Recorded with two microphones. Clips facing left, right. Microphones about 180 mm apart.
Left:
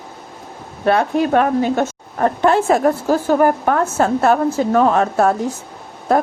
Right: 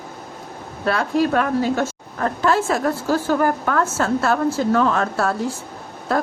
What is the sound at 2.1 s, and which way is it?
Speech, 35° left (ahead or behind).